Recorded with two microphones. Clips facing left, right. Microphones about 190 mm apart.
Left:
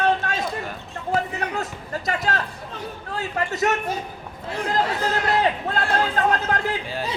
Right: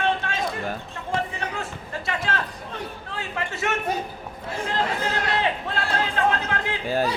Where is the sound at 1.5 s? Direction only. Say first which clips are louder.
Left 3 dB; 40° left (ahead or behind).